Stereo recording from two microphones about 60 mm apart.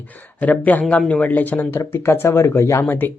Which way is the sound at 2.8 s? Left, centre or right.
Left.